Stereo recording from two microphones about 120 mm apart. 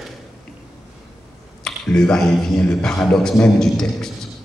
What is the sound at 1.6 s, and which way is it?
Speech, 5° left (ahead or behind).